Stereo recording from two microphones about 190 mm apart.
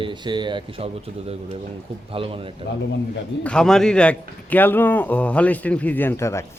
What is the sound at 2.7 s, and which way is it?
Speech, 65° left (ahead or behind).